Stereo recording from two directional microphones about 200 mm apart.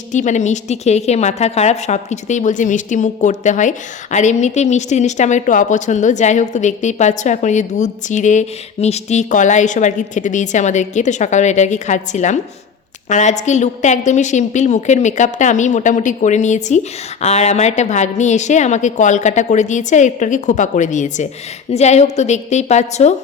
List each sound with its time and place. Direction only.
0.1 s a woman's voice: 35° left (ahead or behind)